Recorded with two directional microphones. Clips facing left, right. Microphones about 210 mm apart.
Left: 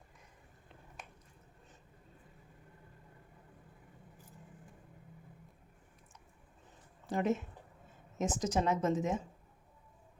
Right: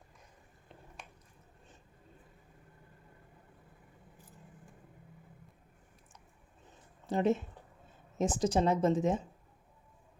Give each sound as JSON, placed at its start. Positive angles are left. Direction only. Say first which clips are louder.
{"t": 7.1, "sound": "speech", "louder": "right 3 dB", "side_deg": -30}